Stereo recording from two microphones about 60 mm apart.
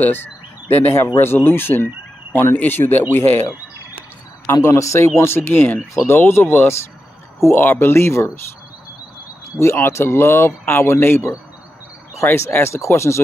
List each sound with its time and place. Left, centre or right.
0.0 s speech: left
4.6 s speech: left
9.6 s speech: left